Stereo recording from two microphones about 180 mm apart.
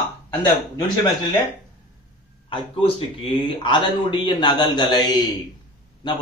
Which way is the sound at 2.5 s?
30° left (ahead or behind).